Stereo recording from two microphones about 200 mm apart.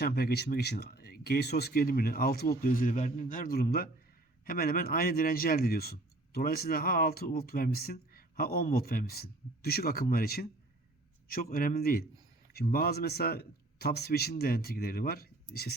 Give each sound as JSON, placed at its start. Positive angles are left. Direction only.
{"t": 0.0, "sound": "a man's voice", "side_deg": 50}